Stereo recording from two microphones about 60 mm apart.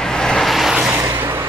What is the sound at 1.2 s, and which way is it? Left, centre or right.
Vehicle, right.